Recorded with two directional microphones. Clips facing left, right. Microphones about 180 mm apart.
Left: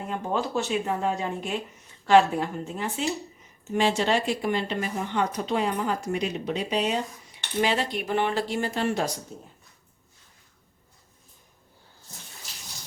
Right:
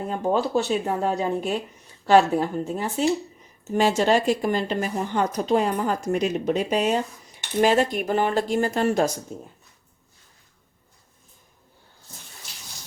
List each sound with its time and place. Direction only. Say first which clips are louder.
0.1 s a woman's voice: right 5 dB; 35° right (ahead or behind)